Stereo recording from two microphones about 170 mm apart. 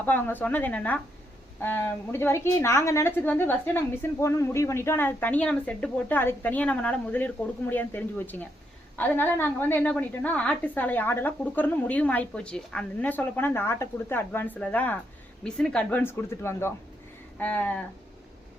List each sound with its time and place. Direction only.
0.0 s a woman's voice: 10° left (ahead or behind)